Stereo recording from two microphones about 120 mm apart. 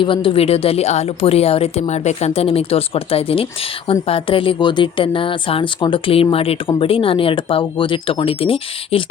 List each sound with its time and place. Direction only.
0.0 s speech: 45° left (ahead or behind)